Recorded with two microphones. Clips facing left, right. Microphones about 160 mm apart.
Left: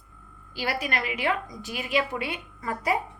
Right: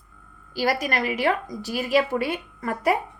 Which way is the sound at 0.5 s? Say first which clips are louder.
Right 5 dB; 40° right (ahead or behind).